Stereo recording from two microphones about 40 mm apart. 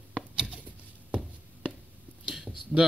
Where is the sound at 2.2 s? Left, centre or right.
Centre.